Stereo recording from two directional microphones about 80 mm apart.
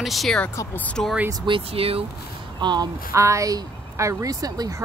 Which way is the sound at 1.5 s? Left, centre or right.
Right.